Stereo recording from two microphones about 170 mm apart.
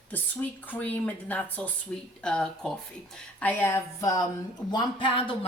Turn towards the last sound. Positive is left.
turn(degrees=30)  # may be behind; listen again after turning